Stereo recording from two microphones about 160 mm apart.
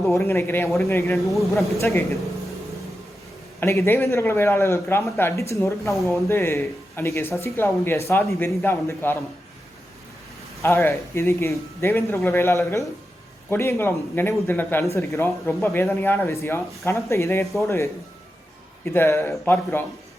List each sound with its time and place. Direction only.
0.1 s speech: 15° left (ahead or behind)
1.1 s speech: centre (ahead or behind)
1.8 s speech: 15° left (ahead or behind)
3.6 s speech: 15° left (ahead or behind)
10.6 s speech: 15° left (ahead or behind)
18.9 s speech: 15° left (ahead or behind)